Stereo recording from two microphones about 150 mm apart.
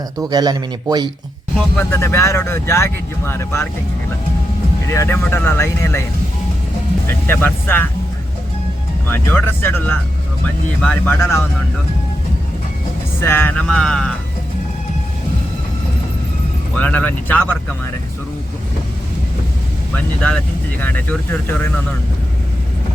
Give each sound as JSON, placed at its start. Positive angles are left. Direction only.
{"t": 0.2, "sound": "a man's voice", "side_deg": -25}
{"t": 1.7, "sound": "speech", "side_deg": 10}
{"t": 4.9, "sound": "speech", "side_deg": 15}
{"t": 7.1, "sound": "speech", "side_deg": 15}
{"t": 9.0, "sound": "speech", "side_deg": 15}
{"t": 13.1, "sound": "speech", "side_deg": 15}
{"t": 16.7, "sound": "speech", "side_deg": 10}
{"t": 20.8, "sound": "speech", "side_deg": 10}